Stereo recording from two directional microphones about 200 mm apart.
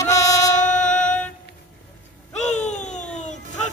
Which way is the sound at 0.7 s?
5° left (ahead or behind).